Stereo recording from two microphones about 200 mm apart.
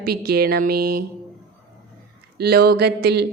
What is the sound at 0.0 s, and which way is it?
A woman's voice, 50° right (ahead or behind).